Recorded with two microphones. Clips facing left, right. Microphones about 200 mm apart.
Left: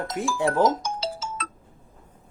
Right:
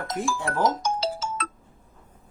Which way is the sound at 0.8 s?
55° right (ahead or behind).